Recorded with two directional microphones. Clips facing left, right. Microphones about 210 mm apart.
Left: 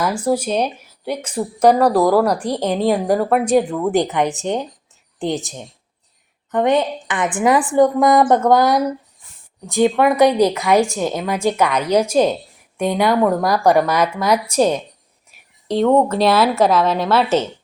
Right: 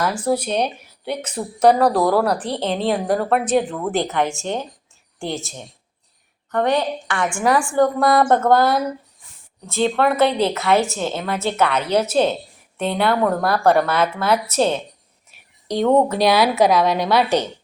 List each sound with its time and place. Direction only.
0.0 s a woman's voice: 10° left (ahead or behind)
8.2 s a woman's voice: 5° left (ahead or behind)
8.4 s a woman's voice: 15° left (ahead or behind)
15.7 s a woman's voice: centre (ahead or behind)